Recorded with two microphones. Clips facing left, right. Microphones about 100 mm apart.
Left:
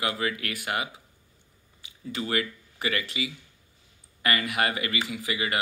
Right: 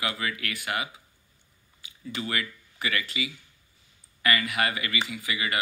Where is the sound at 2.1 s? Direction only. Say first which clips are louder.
Left 3 dB; 35° left (ahead or behind).